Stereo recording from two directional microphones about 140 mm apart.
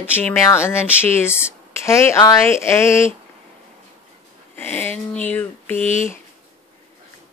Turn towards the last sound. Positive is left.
turn(degrees=60)  # may be behind; listen again after turning